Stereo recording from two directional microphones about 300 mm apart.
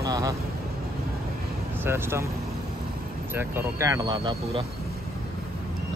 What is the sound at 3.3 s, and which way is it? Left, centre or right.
A man's voice, centre.